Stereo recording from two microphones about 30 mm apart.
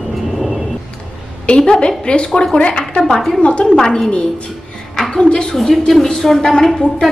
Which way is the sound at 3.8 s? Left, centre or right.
Centre.